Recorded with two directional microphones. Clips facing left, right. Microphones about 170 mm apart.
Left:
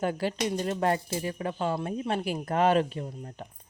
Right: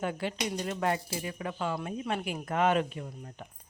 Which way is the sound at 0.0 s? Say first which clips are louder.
Left 4 dB; 35° left (ahead or behind).